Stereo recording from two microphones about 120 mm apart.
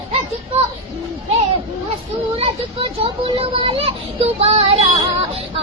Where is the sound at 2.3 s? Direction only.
50° right (ahead or behind).